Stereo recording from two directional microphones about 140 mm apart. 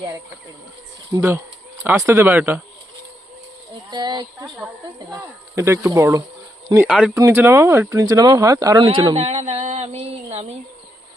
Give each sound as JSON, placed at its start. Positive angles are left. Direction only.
{"t": 1.1, "sound": "speech", "side_deg": -20}
{"t": 3.9, "sound": "speech", "side_deg": -30}
{"t": 4.4, "sound": "speech", "side_deg": -10}
{"t": 6.7, "sound": "speech", "side_deg": -10}
{"t": 7.1, "sound": "speech", "side_deg": -20}
{"t": 8.8, "sound": "speech", "side_deg": -35}
{"t": 9.1, "sound": "a sound", "side_deg": -50}